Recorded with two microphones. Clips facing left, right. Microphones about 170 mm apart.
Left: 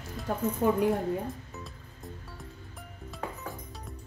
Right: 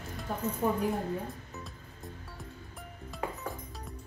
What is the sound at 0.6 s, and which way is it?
Speech, 90° left.